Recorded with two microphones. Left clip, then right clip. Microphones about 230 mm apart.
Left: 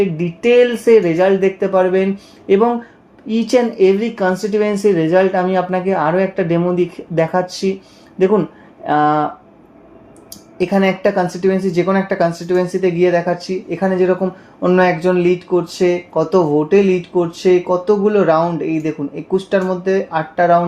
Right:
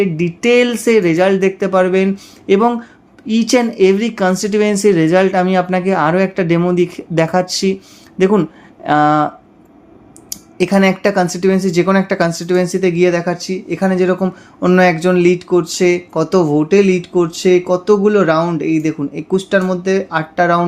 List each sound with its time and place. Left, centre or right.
0.0 s speech: right